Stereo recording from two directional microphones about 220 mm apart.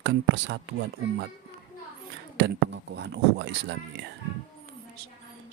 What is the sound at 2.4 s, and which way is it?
Speech, 50° right (ahead or behind).